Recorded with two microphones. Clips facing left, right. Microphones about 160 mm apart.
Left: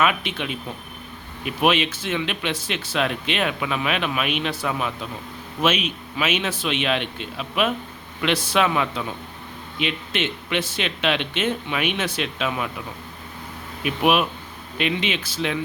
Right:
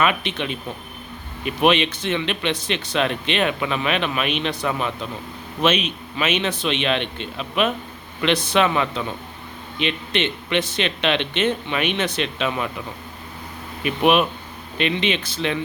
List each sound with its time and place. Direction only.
0.0 s speech: 5° left (ahead or behind)
13.8 s speech: 5° left (ahead or behind)